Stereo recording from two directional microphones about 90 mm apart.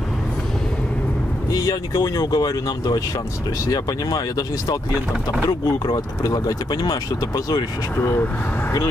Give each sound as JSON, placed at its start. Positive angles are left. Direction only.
{"t": 1.5, "sound": "speech", "side_deg": 45}
{"t": 6.2, "sound": "speech", "side_deg": 45}
{"t": 8.0, "sound": "speech", "side_deg": 30}